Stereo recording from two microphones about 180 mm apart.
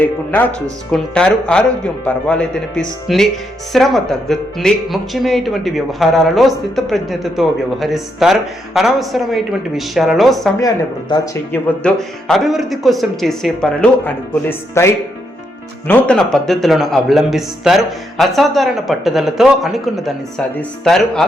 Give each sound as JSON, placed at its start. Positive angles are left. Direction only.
{"t": 0.0, "sound": "speech", "side_deg": 10}
{"t": 11.5, "sound": "speech", "side_deg": 5}
{"t": 15.9, "sound": "speech", "side_deg": 5}